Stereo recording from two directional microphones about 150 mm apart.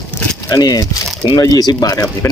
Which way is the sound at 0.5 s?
25° left (ahead or behind).